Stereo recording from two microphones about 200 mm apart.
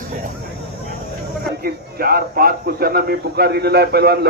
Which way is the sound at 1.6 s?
50° right (ahead or behind).